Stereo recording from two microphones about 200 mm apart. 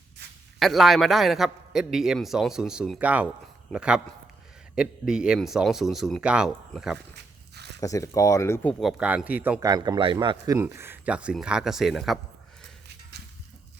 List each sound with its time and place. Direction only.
0.6 s a man's voice: centre (ahead or behind)
7.5 s a sound: 55° right (ahead or behind)
7.8 s speech: 15° left (ahead or behind)
8.8 s speech: 5° right (ahead or behind)